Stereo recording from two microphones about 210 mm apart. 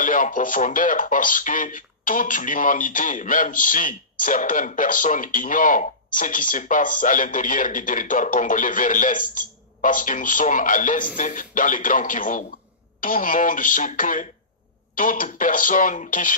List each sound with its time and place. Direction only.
0.0 s speech: 40° left (ahead or behind)